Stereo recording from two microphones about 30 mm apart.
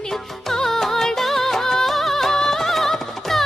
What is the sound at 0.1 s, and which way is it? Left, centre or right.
Music, centre.